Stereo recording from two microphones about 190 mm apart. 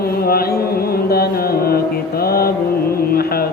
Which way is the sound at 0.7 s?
55° left (ahead or behind).